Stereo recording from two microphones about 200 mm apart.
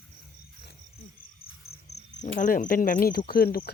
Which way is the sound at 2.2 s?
40° left (ahead or behind).